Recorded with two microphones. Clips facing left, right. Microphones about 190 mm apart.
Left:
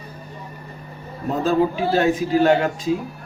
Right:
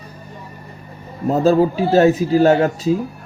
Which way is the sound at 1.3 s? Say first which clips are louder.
Right 5 dB; 40° right (ahead or behind).